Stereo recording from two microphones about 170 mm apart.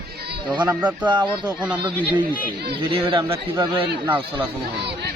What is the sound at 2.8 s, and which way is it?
Speech, 30° right (ahead or behind).